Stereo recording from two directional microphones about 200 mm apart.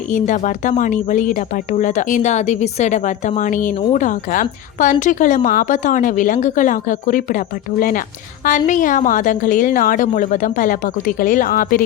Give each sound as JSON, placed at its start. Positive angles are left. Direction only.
{"t": 0.1, "sound": "a woman's voice", "side_deg": 40}